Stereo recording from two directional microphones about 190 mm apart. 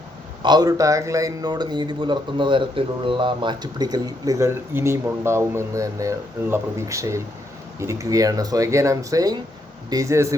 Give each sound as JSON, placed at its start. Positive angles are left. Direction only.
{"t": 0.4, "sound": "speech", "side_deg": -20}